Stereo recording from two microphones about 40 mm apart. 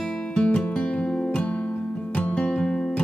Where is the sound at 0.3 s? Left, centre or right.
Left.